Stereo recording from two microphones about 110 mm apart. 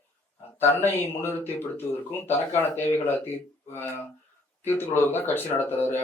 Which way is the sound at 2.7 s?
20° left (ahead or behind).